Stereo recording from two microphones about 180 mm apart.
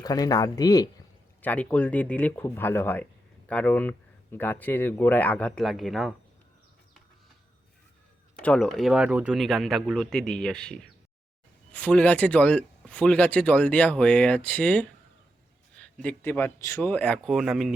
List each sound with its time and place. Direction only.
0.0 s speech: 20° left (ahead or behind)
1.4 s speech: 10° left (ahead or behind)
8.4 s speech: 5° left (ahead or behind)